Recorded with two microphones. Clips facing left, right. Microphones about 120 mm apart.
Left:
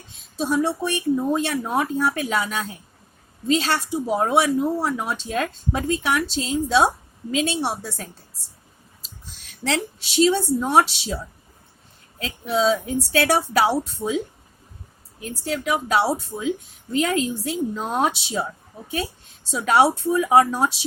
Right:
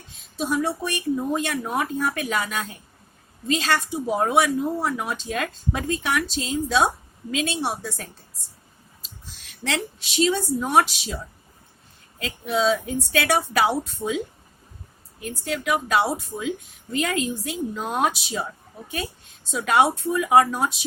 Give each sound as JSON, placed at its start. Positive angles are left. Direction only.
{"t": 0.3, "sound": "speech", "side_deg": 30}
{"t": 9.6, "sound": "speech", "side_deg": 30}
{"t": 12.2, "sound": "speech", "side_deg": 30}
{"t": 15.4, "sound": "speech", "side_deg": 30}
{"t": 19.5, "sound": "speech", "side_deg": 35}